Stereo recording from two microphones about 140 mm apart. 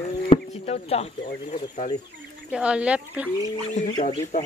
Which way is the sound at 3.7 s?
50° left (ahead or behind).